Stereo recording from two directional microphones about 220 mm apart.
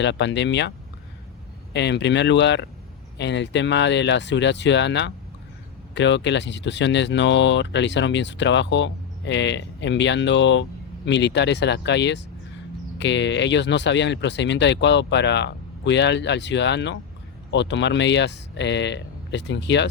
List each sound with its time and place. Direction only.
0.0 s speech: 55° left (ahead or behind)
1.7 s speech: 50° left (ahead or behind)